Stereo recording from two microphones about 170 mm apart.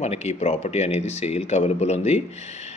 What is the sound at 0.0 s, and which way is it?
Speech, 40° left (ahead or behind).